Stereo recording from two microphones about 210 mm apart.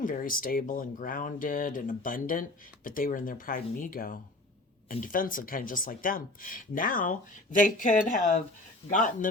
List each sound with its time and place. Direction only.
0.0 s speech: 40° left (ahead or behind)